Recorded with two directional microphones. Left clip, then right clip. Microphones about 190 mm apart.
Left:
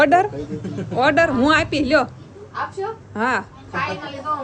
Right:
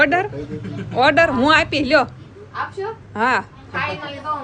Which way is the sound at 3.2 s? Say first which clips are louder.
Right 3 dB; centre (ahead or behind).